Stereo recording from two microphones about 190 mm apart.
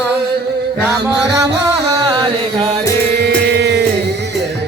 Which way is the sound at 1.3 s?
15° right (ahead or behind).